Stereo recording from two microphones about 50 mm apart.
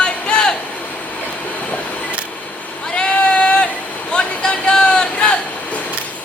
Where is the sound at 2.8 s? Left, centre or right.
Centre.